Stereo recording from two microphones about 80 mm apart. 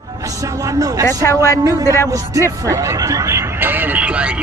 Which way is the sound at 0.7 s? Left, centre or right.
Right.